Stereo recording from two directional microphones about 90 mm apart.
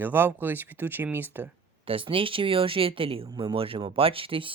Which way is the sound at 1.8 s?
90° right.